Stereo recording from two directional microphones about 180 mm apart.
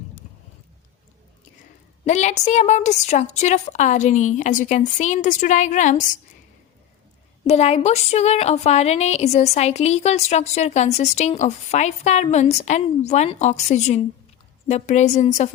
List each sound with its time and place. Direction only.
2.0 s a woman's voice: 40° left (ahead or behind)
7.4 s a woman's voice: 35° left (ahead or behind)